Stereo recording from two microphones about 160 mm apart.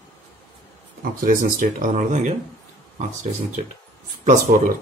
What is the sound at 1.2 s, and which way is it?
Speech, 60° right (ahead or behind).